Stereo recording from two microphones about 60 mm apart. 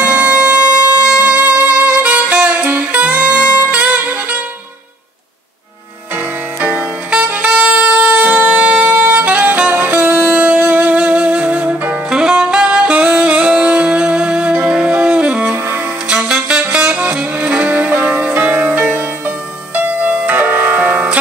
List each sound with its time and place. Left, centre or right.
0.0 s music: right
6.1 s saxophone: right
12.1 s saxophone: centre
15.5 s music: right
16.1 s saxophone: centre